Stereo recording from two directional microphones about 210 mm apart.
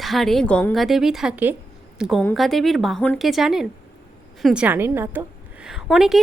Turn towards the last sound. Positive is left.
turn(degrees=0)  # may be behind; listen again after turning